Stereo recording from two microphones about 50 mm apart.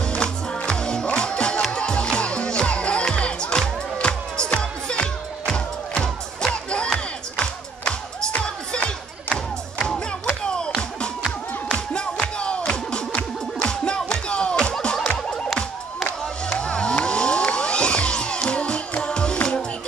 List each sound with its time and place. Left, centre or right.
0.0 s music: centre
5.9 s music: centre
11.9 s music: centre
15.5 s music: centre
16.5 s music: centre